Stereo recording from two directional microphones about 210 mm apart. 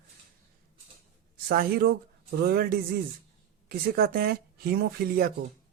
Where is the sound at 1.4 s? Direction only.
45° right (ahead or behind).